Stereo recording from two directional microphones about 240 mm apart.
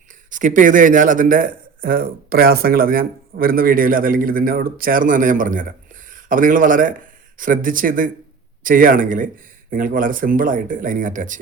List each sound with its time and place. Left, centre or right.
0.3 s a man's voice: right